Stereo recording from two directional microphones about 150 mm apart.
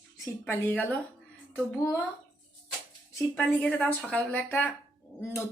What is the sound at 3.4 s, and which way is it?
Speech, 10° left (ahead or behind).